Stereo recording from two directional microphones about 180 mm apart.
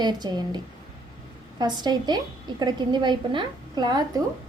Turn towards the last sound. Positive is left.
turn(degrees=-20)  # may be behind; listen again after turning